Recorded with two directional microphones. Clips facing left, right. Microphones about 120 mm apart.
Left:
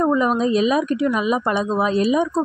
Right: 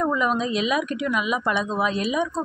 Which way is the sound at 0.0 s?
35° left (ahead or behind).